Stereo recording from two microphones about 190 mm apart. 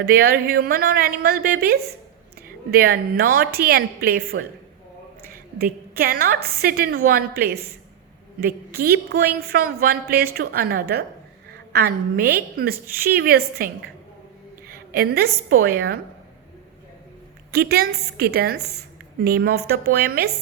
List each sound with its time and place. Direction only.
0.0 s a woman's voice: 55° right (ahead or behind)
5.5 s a woman's voice: 55° right (ahead or behind)
17.5 s a woman's voice: 55° right (ahead or behind)